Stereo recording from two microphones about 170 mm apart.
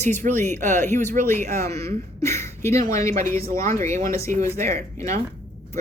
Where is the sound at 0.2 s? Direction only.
45° right (ahead or behind).